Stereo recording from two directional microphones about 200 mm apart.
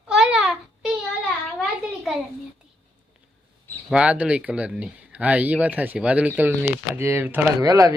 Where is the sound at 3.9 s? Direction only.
5° right (ahead or behind).